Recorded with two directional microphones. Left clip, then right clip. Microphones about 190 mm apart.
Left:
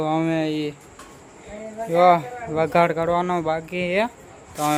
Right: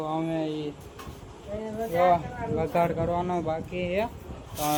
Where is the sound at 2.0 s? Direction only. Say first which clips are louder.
Left 6 dB; 30° left (ahead or behind).